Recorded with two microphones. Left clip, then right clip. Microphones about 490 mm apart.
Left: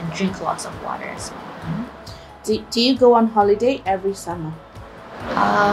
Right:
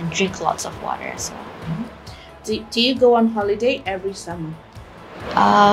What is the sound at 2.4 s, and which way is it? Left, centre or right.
A woman's voice, left.